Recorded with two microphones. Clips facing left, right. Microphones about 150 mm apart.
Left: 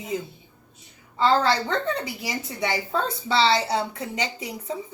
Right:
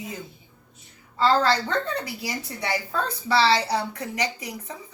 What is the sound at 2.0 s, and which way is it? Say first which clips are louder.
Speech: left 1 dB; 20° left (ahead or behind).